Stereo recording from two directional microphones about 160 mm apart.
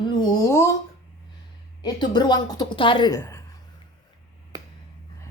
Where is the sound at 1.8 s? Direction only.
25° left (ahead or behind).